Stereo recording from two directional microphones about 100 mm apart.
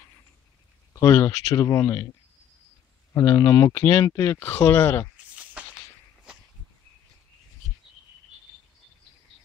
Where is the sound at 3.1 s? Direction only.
35° left (ahead or behind).